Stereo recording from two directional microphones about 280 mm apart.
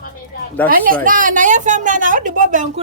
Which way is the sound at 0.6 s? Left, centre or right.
Right.